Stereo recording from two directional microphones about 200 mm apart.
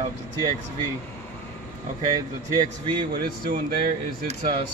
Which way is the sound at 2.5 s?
25° right (ahead or behind).